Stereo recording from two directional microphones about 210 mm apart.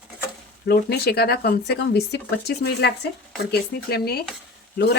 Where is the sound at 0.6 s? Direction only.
50° left (ahead or behind).